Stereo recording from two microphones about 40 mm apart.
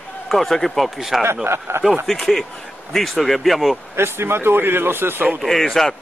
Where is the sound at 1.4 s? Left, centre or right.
Right.